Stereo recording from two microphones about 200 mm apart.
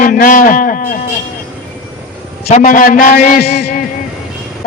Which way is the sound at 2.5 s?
40° left (ahead or behind).